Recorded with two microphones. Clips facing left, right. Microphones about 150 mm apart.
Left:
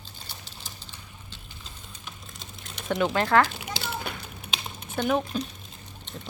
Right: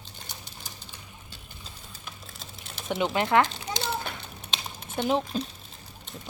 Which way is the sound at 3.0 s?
20° right (ahead or behind).